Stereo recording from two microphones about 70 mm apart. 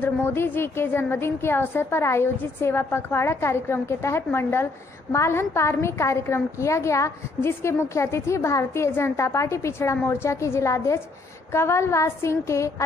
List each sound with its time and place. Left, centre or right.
0.0 s a woman's voice: left